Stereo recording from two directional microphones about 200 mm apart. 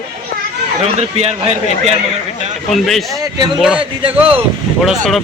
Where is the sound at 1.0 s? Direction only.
30° right (ahead or behind).